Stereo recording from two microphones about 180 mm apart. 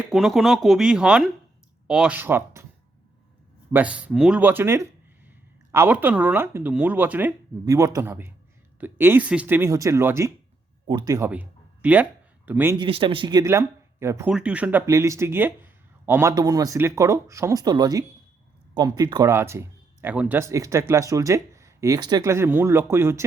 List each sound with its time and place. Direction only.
0.0 s speech: centre (ahead or behind)
3.7 s speech: 10° right (ahead or behind)
11.3 s a sound: 10° right (ahead or behind)
12.5 s speech: 10° right (ahead or behind)
12.7 s speech: 25° right (ahead or behind)